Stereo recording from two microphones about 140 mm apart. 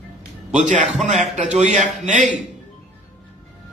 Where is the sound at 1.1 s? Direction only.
60° right (ahead or behind).